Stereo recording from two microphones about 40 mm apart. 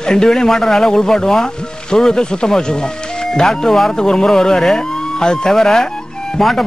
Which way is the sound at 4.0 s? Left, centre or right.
Centre.